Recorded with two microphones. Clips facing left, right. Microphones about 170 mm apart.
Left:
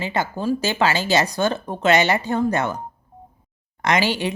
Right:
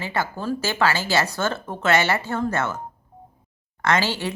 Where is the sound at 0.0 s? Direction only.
20° left (ahead or behind).